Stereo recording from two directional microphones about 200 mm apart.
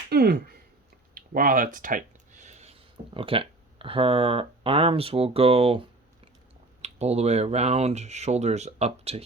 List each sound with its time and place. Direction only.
0.1 s speech: 55° right (ahead or behind)
1.1 s a sound: 45° right (ahead or behind)
3.2 s speech: 25° right (ahead or behind)
6.8 s speech: 35° right (ahead or behind)